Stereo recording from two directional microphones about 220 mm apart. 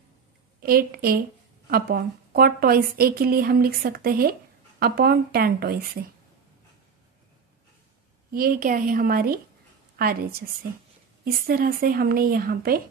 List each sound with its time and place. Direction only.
0.6 s a woman's voice: 45° right (ahead or behind)
8.3 s a woman's voice: 40° right (ahead or behind)